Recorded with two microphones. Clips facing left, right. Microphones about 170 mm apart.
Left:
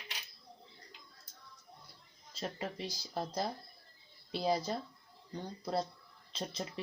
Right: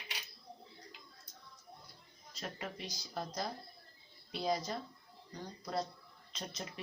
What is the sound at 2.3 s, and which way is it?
Speech, 30° left (ahead or behind).